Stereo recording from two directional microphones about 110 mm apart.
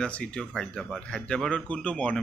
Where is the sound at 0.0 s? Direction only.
10° left (ahead or behind).